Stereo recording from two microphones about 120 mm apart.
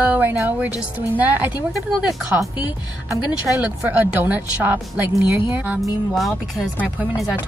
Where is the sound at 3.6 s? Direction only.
15° right (ahead or behind).